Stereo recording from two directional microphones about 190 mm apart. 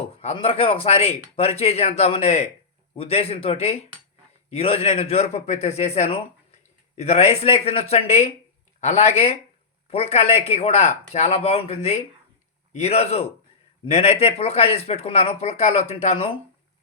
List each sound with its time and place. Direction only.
0.2 s a man's voice: 30° left (ahead or behind)